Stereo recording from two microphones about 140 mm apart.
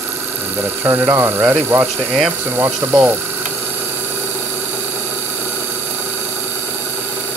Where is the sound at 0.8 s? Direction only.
15° right (ahead or behind).